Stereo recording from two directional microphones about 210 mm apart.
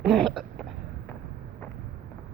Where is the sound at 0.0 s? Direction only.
Centre (ahead or behind).